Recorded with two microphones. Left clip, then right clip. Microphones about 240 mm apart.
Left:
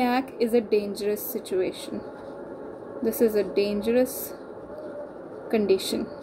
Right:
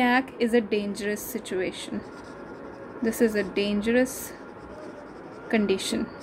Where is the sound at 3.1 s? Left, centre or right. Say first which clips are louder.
Left 2 dB; right.